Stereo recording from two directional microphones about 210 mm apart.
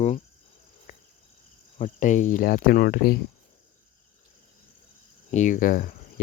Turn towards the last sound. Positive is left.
turn(degrees=40)  # may be behind; listen again after turning